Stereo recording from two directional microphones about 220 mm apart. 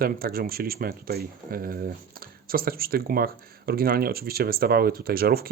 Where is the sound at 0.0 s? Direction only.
45° right (ahead or behind).